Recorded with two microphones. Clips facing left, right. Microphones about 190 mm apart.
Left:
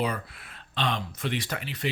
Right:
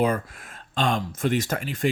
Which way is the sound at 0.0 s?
45° right (ahead or behind).